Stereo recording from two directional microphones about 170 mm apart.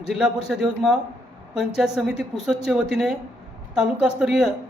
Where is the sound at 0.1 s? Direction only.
5° right (ahead or behind).